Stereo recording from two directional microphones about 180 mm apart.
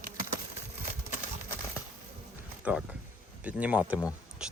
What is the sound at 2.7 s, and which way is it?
Speech, 10° right (ahead or behind).